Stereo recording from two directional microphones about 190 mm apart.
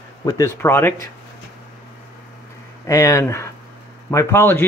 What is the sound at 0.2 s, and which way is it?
Speech, 15° left (ahead or behind).